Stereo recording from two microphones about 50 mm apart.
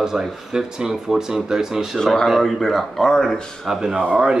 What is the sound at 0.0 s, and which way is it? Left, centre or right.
Speech, centre.